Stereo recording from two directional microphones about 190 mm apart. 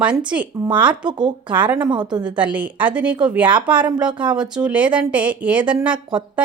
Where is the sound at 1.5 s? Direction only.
10° right (ahead or behind).